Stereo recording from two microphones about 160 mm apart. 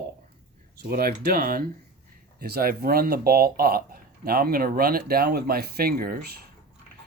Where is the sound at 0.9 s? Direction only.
65° right (ahead or behind).